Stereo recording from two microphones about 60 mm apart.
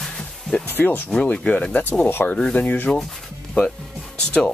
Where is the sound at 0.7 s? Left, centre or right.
Left.